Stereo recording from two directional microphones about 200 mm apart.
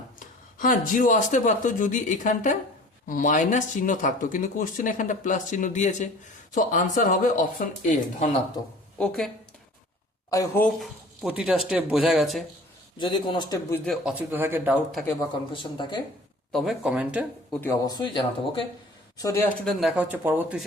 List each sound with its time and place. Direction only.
0.6 s speech: 40° left (ahead or behind)
9.0 s speech: centre (ahead or behind)
10.2 s speech: 15° left (ahead or behind)
10.8 s speech: 5° right (ahead or behind)
13.0 s speech: 25° left (ahead or behind)
13.7 s speech: 10° left (ahead or behind)
13.9 s speech: 5° right (ahead or behind)
15.5 s speech: 25° left (ahead or behind)
16.5 s speech: centre (ahead or behind)
17.6 s speech: 15° left (ahead or behind)
19.6 s speech: centre (ahead or behind)